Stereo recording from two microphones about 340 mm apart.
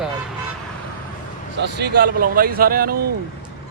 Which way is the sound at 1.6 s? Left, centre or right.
Right.